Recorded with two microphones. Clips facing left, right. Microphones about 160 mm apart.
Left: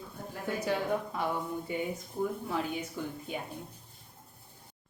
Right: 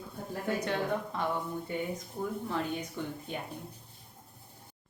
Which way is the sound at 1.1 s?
10° left (ahead or behind).